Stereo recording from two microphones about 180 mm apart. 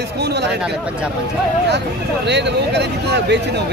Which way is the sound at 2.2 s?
70° right (ahead or behind).